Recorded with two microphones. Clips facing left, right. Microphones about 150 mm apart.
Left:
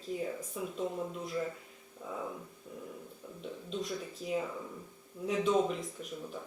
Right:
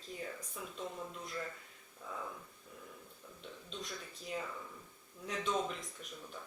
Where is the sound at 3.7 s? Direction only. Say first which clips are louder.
Left 9 dB; 5° left (ahead or behind).